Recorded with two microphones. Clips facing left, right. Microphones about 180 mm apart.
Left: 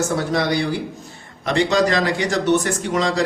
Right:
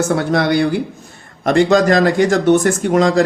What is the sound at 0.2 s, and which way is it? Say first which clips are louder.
Speech: right 5 dB; 60° right (ahead or behind).